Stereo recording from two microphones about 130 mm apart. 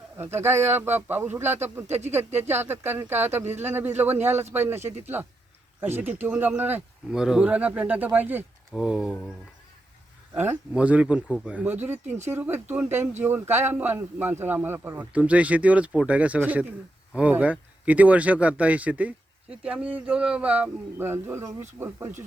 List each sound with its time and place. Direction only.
0.2 s speech: 20° right (ahead or behind)
10.3 s speech: 15° right (ahead or behind)